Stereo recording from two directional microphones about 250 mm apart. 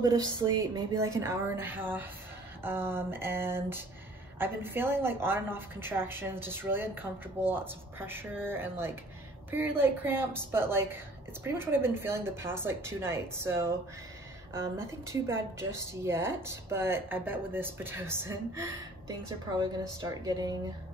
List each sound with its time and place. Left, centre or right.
0.4 s speech: centre